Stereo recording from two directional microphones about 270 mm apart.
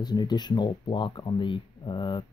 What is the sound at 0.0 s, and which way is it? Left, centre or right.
Speech, centre.